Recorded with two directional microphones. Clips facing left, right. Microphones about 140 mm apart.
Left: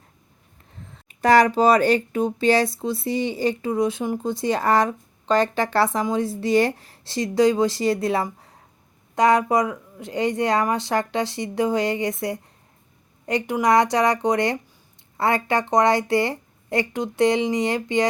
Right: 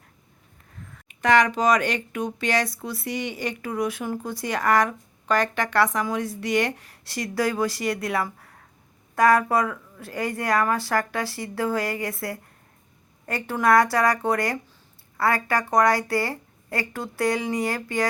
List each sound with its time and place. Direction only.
0.9 s speech: 30° left (ahead or behind)